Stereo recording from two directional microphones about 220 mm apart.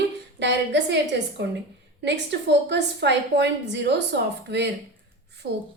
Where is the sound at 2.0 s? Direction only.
50° right (ahead or behind).